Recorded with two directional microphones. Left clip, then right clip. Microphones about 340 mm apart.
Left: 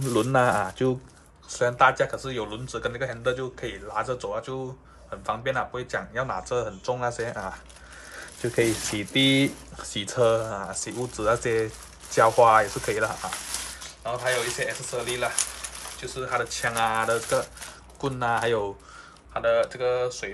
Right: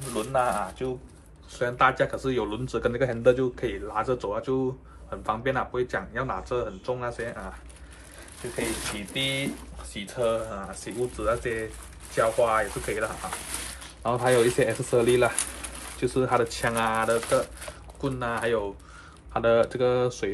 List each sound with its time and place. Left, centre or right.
0.1 s speech: left
1.5 s speech: centre
9.1 s speech: left
9.9 s speech: centre
14.0 s speech: centre
19.3 s speech: centre